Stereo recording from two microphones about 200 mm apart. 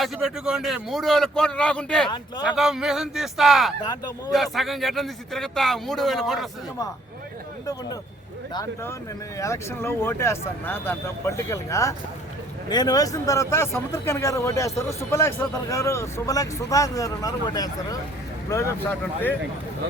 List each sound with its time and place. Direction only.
0.0 s a man's voice: 5° right (ahead or behind)
9.4 s a man's voice: 15° left (ahead or behind)